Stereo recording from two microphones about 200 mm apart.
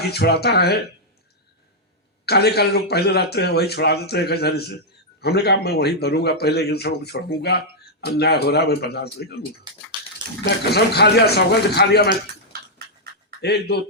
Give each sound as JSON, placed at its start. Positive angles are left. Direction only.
{"t": 0.1, "sound": "speech", "side_deg": 55}
{"t": 2.2, "sound": "a man's voice", "side_deg": 55}
{"t": 10.7, "sound": "speech", "side_deg": 55}
{"t": 13.4, "sound": "speech", "side_deg": 55}